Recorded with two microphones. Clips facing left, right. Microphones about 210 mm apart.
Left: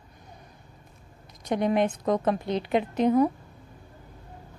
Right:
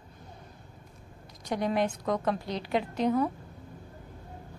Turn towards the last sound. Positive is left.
turn(degrees=20)  # may be behind; listen again after turning